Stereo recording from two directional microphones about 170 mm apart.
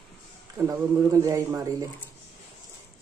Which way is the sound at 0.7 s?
20° right (ahead or behind).